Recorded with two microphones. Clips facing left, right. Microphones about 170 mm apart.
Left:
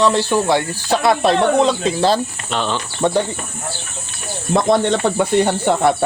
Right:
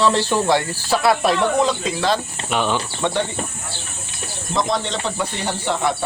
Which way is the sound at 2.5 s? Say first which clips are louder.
Right 1 dB; 10° right (ahead or behind).